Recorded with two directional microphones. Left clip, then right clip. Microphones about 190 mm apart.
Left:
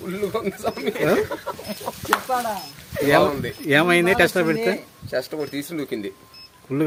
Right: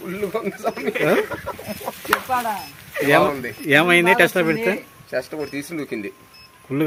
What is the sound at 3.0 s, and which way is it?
Speech, centre (ahead or behind).